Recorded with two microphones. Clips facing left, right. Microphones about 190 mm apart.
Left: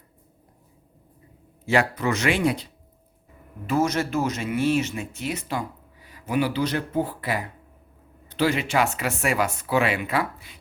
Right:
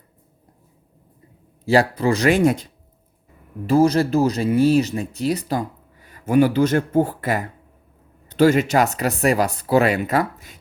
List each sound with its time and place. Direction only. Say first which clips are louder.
1.6 s speech: right 5 dB; 35° right (ahead or behind)
3.7 s speech: right 7 dB; 35° right (ahead or behind)